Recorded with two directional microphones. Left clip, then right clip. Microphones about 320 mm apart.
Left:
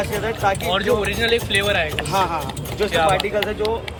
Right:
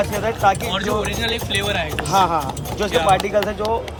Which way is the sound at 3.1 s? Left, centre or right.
Centre.